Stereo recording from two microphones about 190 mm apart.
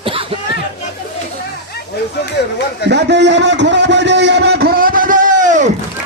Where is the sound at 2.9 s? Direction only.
65° right (ahead or behind); by 5.7 s 40° right (ahead or behind).